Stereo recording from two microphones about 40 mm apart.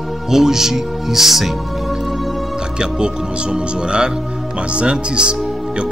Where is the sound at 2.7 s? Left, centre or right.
Right.